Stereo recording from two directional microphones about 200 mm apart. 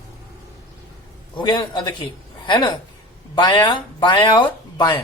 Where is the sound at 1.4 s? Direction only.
25° left (ahead or behind).